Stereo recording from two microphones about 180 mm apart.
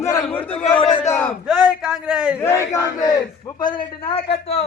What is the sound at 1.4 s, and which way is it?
Speech, 5° right (ahead or behind).